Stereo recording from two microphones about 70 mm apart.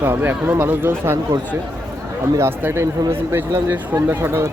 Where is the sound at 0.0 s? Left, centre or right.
Right.